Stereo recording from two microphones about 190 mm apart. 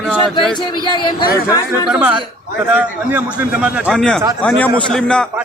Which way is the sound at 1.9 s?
5° right (ahead or behind).